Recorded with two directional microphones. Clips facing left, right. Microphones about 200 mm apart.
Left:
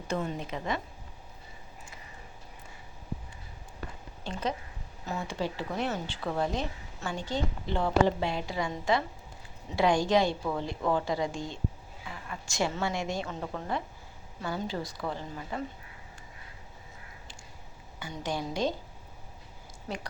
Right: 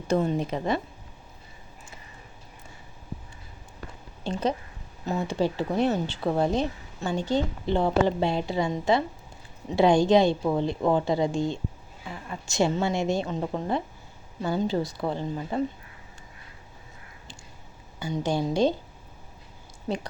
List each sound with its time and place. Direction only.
0.2 s a woman's voice: 35° right (ahead or behind)
4.2 s speech: 30° right (ahead or behind)
18.3 s speech: 30° right (ahead or behind)